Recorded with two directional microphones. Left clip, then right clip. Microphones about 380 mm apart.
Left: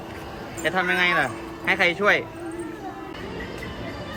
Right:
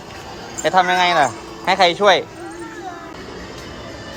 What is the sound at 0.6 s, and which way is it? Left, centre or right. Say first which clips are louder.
A man's voice: right 7 dB; centre.